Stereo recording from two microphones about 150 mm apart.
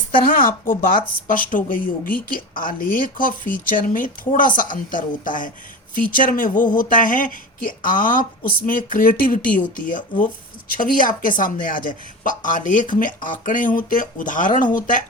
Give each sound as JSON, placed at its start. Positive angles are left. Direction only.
{"t": 0.3, "sound": "a woman's voice", "side_deg": 70}